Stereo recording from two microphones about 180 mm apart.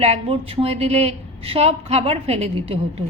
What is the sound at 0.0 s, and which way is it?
A woman's voice, 35° right (ahead or behind).